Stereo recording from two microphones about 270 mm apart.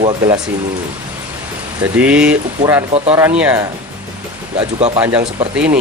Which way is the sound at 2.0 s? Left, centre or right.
Centre.